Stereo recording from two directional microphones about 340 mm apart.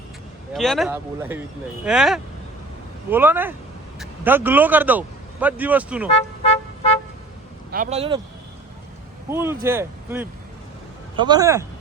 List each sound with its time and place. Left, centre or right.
0.5 s speech: centre
6.1 s speech: centre
7.7 s speech: right
9.3 s speech: centre